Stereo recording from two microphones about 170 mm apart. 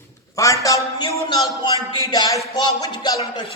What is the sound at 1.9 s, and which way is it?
Speech, 25° left (ahead or behind).